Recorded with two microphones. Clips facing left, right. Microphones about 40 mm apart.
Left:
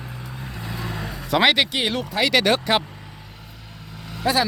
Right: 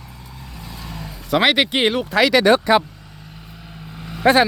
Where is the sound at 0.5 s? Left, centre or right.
Left.